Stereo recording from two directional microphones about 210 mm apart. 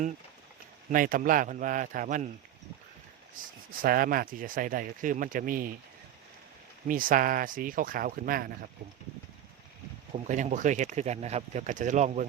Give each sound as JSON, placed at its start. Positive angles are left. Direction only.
{"t": 0.9, "sound": "speech", "side_deg": -40}
{"t": 3.3, "sound": "speech", "side_deg": -40}
{"t": 6.8, "sound": "speech", "side_deg": -40}
{"t": 10.2, "sound": "speech", "side_deg": -35}